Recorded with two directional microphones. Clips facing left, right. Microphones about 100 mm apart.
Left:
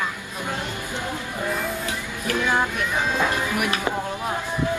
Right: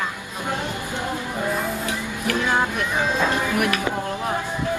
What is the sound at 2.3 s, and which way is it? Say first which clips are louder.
Music: even; 15° right (ahead or behind).